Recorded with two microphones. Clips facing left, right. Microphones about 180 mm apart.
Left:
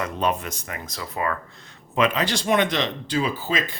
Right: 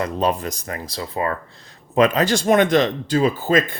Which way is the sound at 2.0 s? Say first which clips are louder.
Right 5 dB; 45° right (ahead or behind).